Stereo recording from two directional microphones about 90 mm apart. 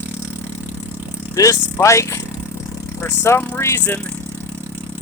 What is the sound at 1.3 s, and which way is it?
Speech, 35° left (ahead or behind).